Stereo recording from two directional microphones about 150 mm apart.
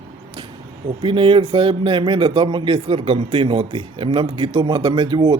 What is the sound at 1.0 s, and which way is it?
Speech, 35° right (ahead or behind).